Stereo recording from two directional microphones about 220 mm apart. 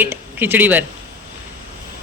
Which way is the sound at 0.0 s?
10° right (ahead or behind).